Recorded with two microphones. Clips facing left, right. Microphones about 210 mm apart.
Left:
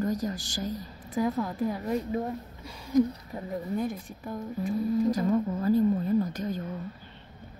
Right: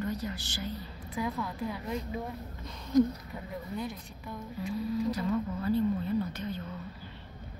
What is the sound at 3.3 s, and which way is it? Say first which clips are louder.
Speech: left 6 dB; 45° left (ahead or behind).